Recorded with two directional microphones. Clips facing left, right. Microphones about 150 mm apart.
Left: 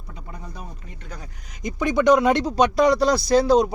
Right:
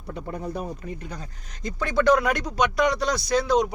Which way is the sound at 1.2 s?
15° left (ahead or behind).